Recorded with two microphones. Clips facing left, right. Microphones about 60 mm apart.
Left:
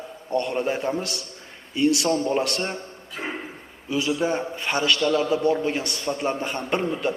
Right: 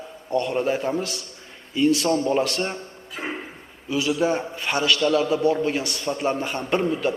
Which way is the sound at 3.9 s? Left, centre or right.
Left.